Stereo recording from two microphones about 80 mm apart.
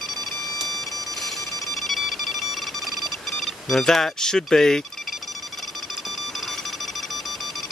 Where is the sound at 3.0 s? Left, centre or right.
Centre.